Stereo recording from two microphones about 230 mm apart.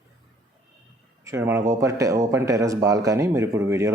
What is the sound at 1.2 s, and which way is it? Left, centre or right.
Speech, centre.